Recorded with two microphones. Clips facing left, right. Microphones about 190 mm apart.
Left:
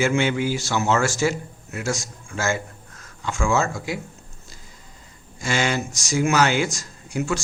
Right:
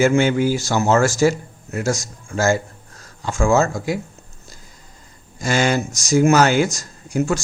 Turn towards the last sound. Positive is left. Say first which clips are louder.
# right 5 dB
turn(degrees=-40)  # may be behind; listen again after turning